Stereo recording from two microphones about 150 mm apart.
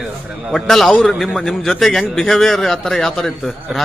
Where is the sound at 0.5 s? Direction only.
Centre (ahead or behind).